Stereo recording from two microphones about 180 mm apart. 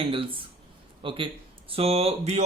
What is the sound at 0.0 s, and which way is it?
A man's voice, 30° right (ahead or behind).